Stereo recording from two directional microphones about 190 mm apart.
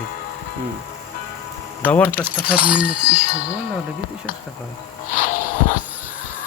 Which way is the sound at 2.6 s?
5° right (ahead or behind).